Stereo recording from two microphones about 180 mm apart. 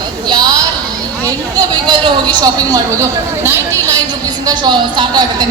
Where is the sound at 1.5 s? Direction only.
25° right (ahead or behind).